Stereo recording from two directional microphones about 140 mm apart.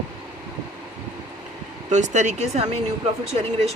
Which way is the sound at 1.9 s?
60° right (ahead or behind).